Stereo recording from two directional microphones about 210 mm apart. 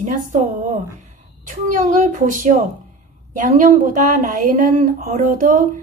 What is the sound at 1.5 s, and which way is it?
Speech, 35° right (ahead or behind).